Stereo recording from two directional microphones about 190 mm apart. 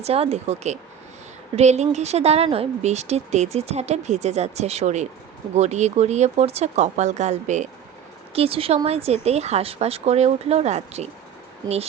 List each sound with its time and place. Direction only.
0.0 s speech: 35° right (ahead or behind)